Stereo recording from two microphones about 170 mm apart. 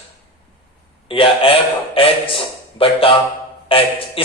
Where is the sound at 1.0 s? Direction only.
30° left (ahead or behind).